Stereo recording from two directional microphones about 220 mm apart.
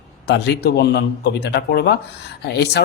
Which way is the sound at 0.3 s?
50° left (ahead or behind).